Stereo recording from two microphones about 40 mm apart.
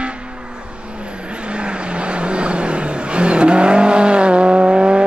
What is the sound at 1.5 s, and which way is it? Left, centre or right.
Vehicle, right.